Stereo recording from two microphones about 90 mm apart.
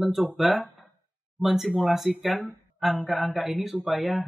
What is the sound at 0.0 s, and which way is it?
Speech, centre (ahead or behind).